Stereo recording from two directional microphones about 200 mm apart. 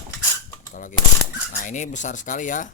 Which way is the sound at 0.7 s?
40° left (ahead or behind).